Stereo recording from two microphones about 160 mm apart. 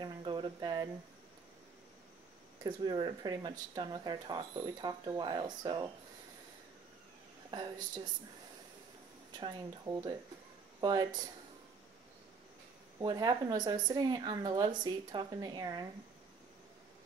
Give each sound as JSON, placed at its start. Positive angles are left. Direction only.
{"t": 0.0, "sound": "cricket", "side_deg": -30}
{"t": 2.6, "sound": "speech", "side_deg": -30}
{"t": 9.4, "sound": "speech", "side_deg": -25}
{"t": 13.0, "sound": "speech", "side_deg": -25}